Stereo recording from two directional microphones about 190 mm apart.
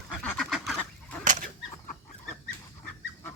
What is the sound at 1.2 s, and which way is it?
Fowl, 45° right (ahead or behind).